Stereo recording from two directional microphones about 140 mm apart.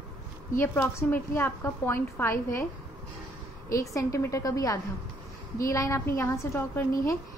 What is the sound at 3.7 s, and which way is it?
A woman's voice, 25° left (ahead or behind).